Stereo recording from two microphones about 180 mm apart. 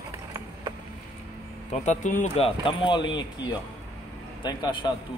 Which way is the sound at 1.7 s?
40° left (ahead or behind).